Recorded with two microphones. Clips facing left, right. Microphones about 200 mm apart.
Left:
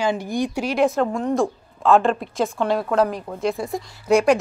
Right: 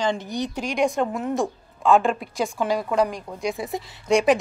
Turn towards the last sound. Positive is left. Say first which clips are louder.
# left 2 dB
turn(degrees=0)  # may be behind; listen again after turning